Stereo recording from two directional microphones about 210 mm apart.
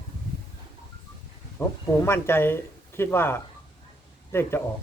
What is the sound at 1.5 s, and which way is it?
Speech, 10° left (ahead or behind).